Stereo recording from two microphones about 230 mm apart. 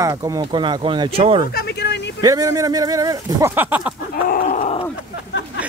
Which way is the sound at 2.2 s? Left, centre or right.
Centre.